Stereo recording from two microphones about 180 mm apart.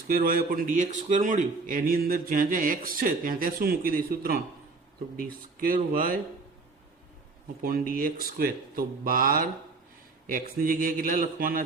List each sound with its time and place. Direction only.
0.1 s speech: 55° right (ahead or behind)
7.6 s speech: 50° right (ahead or behind)